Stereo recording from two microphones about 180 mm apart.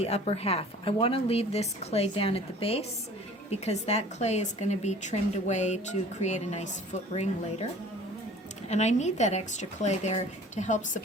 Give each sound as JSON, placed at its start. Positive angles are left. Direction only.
{"t": 0.0, "sound": "a woman's voice", "side_deg": 35}
{"t": 8.7, "sound": "a woman's voice", "side_deg": 40}